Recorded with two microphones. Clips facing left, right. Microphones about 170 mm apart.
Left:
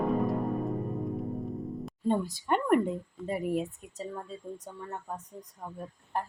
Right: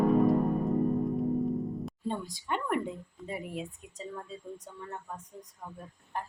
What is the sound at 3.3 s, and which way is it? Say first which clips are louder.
Speech: left 7 dB; 45° left (ahead or behind).